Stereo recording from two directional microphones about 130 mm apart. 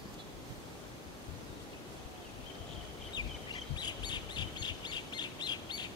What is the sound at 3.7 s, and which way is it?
Bird, 35° left (ahead or behind).